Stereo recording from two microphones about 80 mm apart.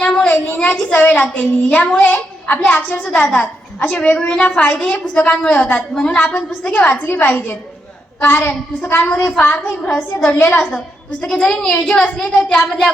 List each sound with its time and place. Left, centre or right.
0.0 s a sound: centre
0.5 s a woman's voice: centre
5.9 s a woman's voice: centre
9.9 s a woman's voice: centre
10.3 s a woman's voice: left
11.2 s a woman's voice: centre